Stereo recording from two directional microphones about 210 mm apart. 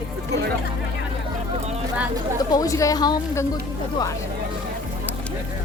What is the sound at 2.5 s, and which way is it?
Speech, 15° left (ahead or behind).